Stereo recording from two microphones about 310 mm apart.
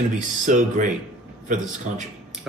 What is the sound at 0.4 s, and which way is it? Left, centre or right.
Speech, right.